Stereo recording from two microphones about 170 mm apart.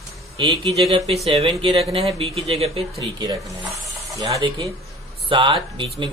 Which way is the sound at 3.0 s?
20° right (ahead or behind).